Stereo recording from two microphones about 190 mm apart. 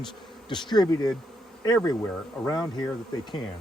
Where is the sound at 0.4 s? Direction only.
25° left (ahead or behind).